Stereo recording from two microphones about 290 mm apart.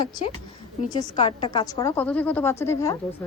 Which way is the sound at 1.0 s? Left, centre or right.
Centre.